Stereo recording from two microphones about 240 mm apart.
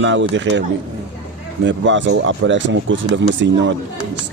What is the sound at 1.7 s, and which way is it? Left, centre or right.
A man's voice, right.